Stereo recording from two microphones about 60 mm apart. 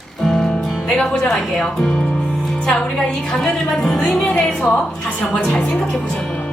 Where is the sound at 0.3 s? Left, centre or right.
Centre.